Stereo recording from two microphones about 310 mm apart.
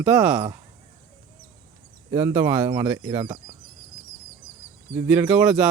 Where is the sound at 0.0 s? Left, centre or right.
Centre.